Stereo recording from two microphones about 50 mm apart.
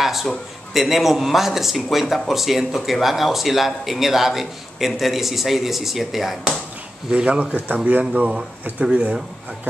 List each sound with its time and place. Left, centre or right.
0.0 s a sound: centre
0.7 s speech: centre
7.1 s speech: right